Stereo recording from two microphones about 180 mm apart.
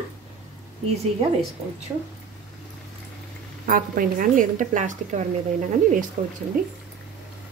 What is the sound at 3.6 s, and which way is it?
A woman's voice, 50° right (ahead or behind).